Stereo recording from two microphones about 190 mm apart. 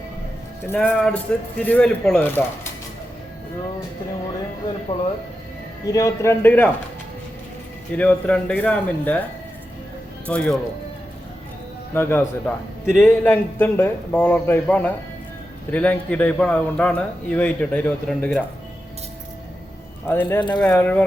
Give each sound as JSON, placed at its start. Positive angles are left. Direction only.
{"t": 0.7, "sound": "a man's voice", "side_deg": 5}
{"t": 5.8, "sound": "a man's voice", "side_deg": 20}
{"t": 7.9, "sound": "a man's voice", "side_deg": 5}
{"t": 10.2, "sound": "speech", "side_deg": 5}
{"t": 11.9, "sound": "a man's voice", "side_deg": 10}
{"t": 20.1, "sound": "a man's voice", "side_deg": 10}